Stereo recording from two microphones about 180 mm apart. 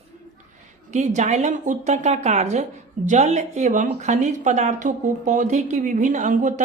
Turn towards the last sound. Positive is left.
turn(degrees=-45)  # may be behind; listen again after turning